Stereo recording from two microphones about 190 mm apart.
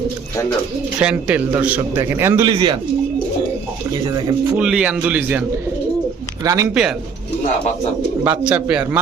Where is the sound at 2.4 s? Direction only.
25° right (ahead or behind).